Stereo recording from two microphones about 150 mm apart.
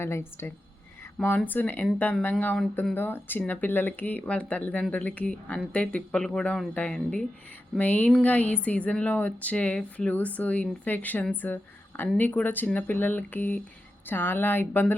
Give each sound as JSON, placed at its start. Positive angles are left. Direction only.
{"t": 0.0, "sound": "speech", "side_deg": 15}